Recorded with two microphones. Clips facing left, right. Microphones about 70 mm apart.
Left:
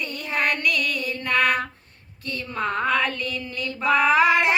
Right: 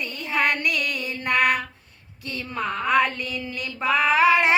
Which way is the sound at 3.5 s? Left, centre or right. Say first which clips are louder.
Left 2 dB; right.